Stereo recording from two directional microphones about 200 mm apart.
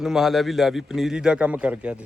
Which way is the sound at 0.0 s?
Centre (ahead or behind).